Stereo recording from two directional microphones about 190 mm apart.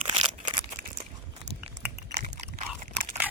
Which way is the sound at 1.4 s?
30° right (ahead or behind).